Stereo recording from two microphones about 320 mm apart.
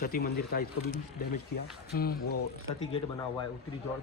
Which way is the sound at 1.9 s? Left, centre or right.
Left.